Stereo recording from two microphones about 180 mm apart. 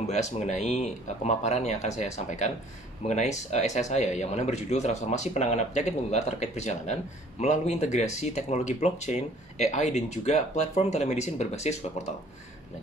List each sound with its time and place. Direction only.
0.0 s speech: 40° left (ahead or behind)